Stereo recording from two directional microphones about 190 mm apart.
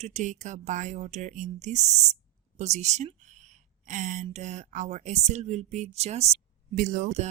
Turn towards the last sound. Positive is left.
turn(degrees=-40)  # may be behind; listen again after turning